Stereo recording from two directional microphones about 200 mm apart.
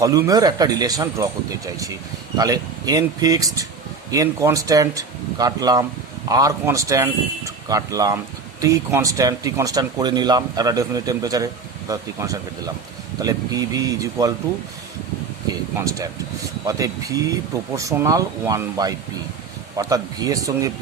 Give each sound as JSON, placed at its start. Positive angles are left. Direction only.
{"t": 0.0, "sound": "speech", "side_deg": -15}
{"t": 15.8, "sound": "speech", "side_deg": -15}